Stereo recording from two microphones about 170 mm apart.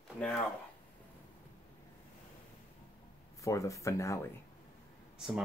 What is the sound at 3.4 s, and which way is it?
Speech, 20° left (ahead or behind).